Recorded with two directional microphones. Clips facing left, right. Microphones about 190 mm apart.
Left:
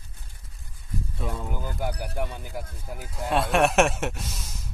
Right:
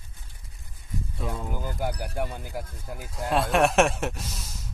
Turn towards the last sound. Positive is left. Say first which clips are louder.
# even
turn(degrees=0)  # may be behind; listen again after turning